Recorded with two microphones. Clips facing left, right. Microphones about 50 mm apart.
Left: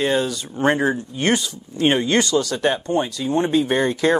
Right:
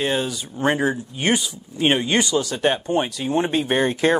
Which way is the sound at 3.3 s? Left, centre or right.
Right.